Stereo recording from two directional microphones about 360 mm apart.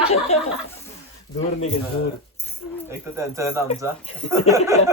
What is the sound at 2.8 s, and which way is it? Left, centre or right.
Speech, centre.